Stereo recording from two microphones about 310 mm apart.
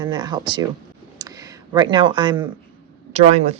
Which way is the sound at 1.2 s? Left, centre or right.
Centre.